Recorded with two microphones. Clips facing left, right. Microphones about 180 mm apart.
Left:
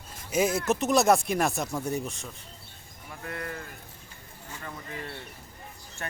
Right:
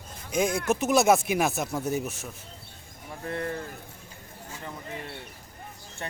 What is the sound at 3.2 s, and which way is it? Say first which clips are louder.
Speech: right 5 dB; 30° right (ahead or behind).